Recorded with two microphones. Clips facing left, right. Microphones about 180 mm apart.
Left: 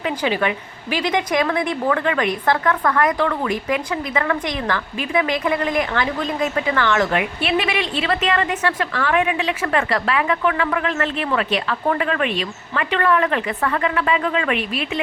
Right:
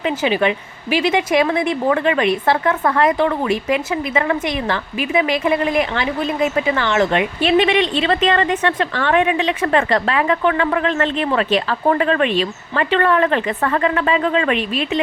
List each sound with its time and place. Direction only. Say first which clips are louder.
0.0 s speech: right 3 dB; 20° right (ahead or behind)